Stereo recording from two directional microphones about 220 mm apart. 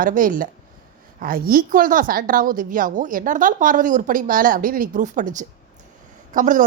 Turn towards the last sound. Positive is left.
turn(degrees=-35)  # may be behind; listen again after turning